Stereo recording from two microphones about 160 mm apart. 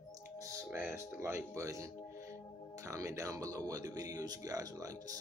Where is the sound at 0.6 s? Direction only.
10° right (ahead or behind).